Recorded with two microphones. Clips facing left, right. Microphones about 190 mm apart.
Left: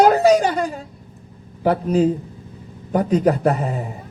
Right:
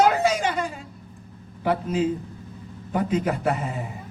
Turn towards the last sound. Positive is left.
turn(degrees=40)  # may be behind; listen again after turning